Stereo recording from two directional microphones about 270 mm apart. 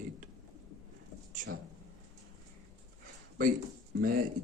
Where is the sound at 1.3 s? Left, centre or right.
Right.